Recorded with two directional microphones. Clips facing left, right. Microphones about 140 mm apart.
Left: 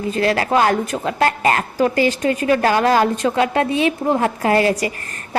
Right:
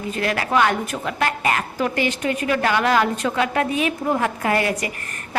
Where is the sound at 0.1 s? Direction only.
30° left (ahead or behind).